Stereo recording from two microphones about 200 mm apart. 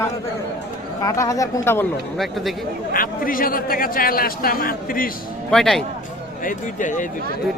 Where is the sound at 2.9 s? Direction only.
45° left (ahead or behind).